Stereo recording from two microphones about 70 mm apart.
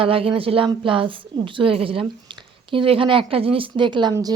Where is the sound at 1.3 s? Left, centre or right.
Right.